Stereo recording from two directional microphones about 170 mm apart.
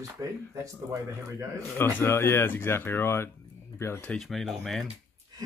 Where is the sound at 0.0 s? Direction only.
20° right (ahead or behind).